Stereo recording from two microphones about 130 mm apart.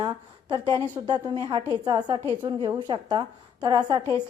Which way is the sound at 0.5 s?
35° right (ahead or behind).